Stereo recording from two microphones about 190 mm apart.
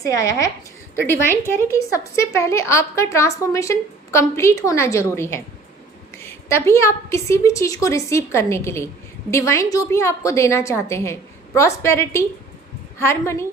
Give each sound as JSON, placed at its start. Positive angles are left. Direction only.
{"t": 0.0, "sound": "a woman's voice", "side_deg": 15}